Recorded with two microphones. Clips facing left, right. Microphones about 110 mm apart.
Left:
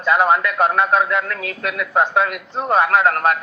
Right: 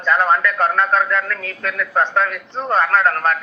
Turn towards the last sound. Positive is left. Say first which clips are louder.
# left 1 dB
turn(degrees=15)  # may be behind; listen again after turning